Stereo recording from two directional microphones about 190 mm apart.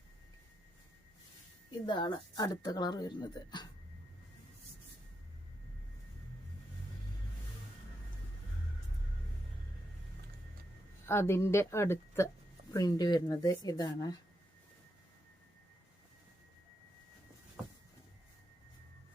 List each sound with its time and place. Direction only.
1.9 s speech: 25° left (ahead or behind)
11.0 s a woman's voice: 15° left (ahead or behind)